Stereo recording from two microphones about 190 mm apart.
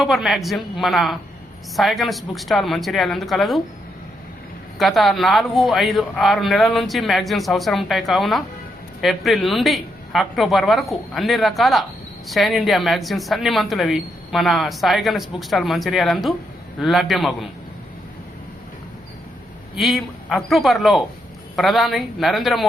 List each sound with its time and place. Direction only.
0.0 s a man's voice: centre (ahead or behind)
4.8 s a man's voice: centre (ahead or behind)
19.7 s a man's voice: centre (ahead or behind)